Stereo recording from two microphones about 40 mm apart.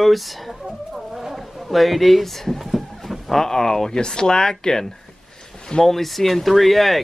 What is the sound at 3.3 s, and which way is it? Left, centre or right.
Speech, centre.